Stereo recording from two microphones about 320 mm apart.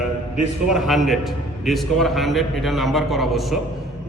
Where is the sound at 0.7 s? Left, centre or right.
Centre.